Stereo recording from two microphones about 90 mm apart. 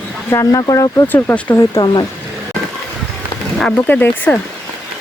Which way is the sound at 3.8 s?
15° left (ahead or behind).